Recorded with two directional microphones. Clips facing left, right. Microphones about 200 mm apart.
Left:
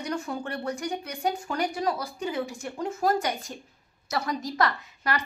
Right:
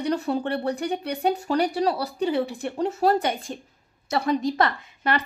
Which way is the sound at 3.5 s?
20° right (ahead or behind).